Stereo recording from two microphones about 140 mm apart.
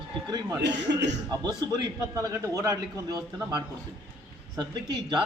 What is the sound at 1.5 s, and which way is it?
A man's voice, 30° right (ahead or behind).